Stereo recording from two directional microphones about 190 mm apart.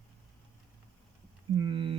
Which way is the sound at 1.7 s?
25° right (ahead or behind).